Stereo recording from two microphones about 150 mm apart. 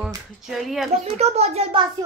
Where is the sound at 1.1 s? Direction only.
45° right (ahead or behind).